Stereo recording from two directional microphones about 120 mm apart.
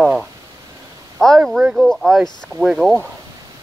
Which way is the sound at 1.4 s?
5° right (ahead or behind).